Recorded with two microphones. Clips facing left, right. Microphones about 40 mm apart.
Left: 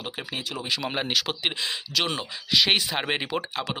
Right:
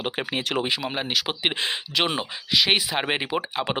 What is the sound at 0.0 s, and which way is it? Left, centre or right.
Speech, right.